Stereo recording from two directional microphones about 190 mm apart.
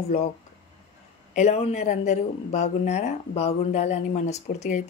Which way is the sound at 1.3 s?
35° left (ahead or behind).